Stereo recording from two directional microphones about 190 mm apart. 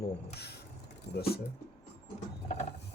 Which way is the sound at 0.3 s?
60° left (ahead or behind).